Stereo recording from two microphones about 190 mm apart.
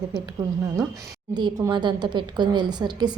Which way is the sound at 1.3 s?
20° right (ahead or behind).